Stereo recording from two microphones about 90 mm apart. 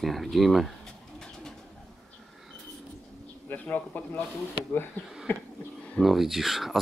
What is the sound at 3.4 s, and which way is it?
Speech, 20° left (ahead or behind).